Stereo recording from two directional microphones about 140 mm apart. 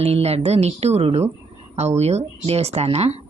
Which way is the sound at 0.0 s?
45° right (ahead or behind).